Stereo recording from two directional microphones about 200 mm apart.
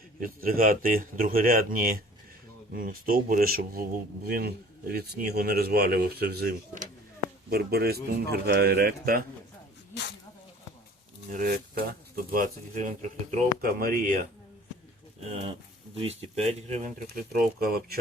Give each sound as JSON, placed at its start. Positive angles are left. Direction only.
{"t": 0.2, "sound": "a man's voice", "side_deg": -45}
{"t": 11.3, "sound": "a man's voice", "side_deg": -45}
{"t": 16.0, "sound": "speech", "side_deg": -30}